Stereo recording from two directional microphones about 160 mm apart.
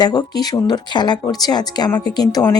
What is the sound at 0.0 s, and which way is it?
Speech, 25° left (ahead or behind).